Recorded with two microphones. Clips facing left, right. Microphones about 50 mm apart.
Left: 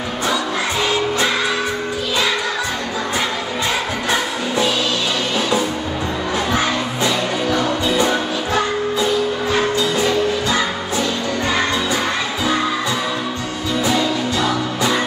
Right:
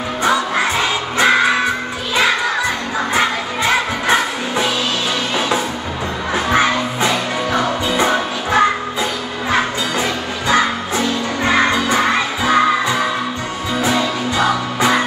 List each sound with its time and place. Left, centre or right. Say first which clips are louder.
1.1 s music: right 5 dB; right
6.3 s crowd: right 5 dB; right
7.5 s music: right 2 dB; right
10.5 s music: right 4 dB; right
13.8 s music: right 1 dB; right